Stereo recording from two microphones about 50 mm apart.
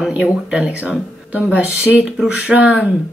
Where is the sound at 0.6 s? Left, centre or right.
Right.